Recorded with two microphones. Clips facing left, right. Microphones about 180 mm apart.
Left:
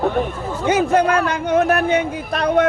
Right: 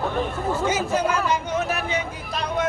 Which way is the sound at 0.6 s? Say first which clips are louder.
Left 9 dB; 60° left (ahead or behind).